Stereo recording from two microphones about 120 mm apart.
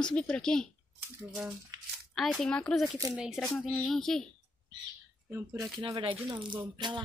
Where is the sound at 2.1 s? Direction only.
Centre (ahead or behind).